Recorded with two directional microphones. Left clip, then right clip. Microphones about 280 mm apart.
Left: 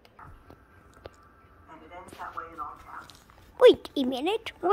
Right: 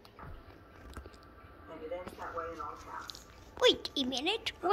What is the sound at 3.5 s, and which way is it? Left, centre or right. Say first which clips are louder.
Speech: left 9 dB; centre.